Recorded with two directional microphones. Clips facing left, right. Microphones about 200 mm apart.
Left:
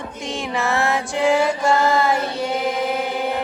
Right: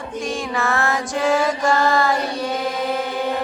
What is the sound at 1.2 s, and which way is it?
Mantra, 20° left (ahead or behind).